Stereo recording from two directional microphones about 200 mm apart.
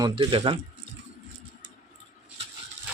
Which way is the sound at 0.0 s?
20° right (ahead or behind).